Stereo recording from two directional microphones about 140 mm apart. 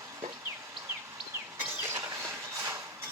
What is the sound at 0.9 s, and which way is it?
Train, 15° right (ahead or behind).